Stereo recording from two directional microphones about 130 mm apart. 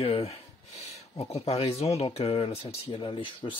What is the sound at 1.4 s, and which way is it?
Speech, 50° left (ahead or behind).